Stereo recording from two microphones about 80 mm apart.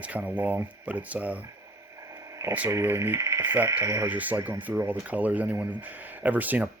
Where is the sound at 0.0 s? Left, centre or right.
Centre.